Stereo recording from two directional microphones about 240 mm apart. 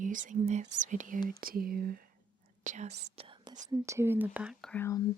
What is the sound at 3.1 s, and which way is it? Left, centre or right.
Whispering, right.